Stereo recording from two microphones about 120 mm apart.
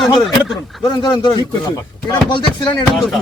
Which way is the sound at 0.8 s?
35° left (ahead or behind).